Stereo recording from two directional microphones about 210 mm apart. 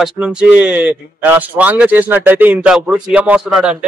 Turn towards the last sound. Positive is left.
turn(degrees=-5)  # may be behind; listen again after turning